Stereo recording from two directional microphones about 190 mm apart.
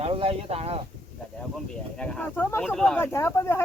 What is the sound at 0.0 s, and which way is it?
Speech, 30° right (ahead or behind).